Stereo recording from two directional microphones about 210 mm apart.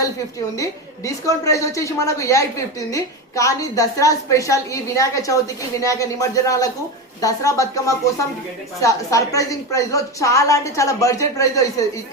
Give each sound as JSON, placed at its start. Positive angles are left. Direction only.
{"t": 0.5, "sound": "a woman's voice", "side_deg": 15}